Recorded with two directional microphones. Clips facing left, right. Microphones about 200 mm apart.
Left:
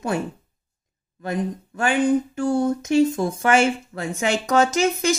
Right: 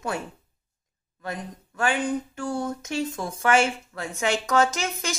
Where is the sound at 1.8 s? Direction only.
25° left (ahead or behind).